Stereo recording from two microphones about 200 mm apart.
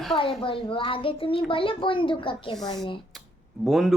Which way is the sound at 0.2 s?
25° left (ahead or behind).